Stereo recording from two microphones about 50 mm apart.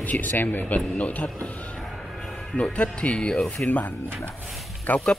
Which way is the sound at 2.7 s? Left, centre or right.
Left.